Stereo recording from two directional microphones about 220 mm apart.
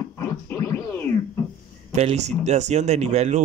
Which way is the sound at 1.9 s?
30° right (ahead or behind).